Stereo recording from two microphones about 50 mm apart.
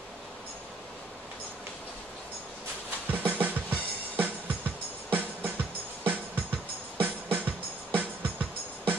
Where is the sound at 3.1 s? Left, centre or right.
Right.